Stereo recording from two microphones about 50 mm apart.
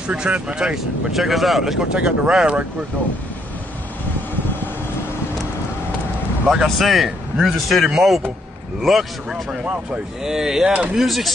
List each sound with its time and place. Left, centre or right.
0.0 s speech: right
1.1 s speech: centre; by 2.6 s right
6.4 s speech: centre
6.8 s speech: centre
10.6 s speech: right
11.0 s speech: centre